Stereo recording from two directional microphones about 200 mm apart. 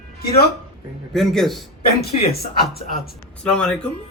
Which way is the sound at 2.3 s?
50° left (ahead or behind).